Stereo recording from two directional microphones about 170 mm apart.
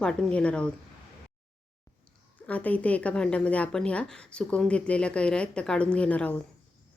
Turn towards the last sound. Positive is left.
turn(degrees=10)  # may be behind; listen again after turning